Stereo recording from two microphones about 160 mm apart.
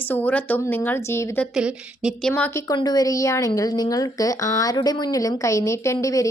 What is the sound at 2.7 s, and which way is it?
A woman's voice, 25° left (ahead or behind).